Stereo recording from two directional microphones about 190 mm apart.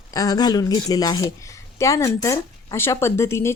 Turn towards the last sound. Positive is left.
turn(degrees=15)  # may be behind; listen again after turning